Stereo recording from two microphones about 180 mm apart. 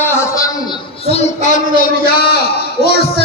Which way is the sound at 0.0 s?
15° left (ahead or behind).